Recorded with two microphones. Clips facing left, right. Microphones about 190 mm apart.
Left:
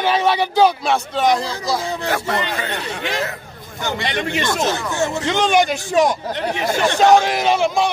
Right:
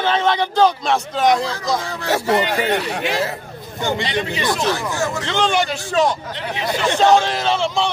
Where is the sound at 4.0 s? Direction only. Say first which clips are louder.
Right 1 dB; 55° left (ahead or behind).